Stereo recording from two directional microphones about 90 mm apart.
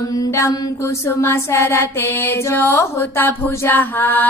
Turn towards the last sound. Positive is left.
turn(degrees=20)  # may be behind; listen again after turning